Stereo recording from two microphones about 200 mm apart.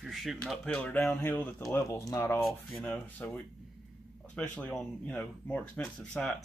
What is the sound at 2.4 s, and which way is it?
Speech, 5° left (ahead or behind).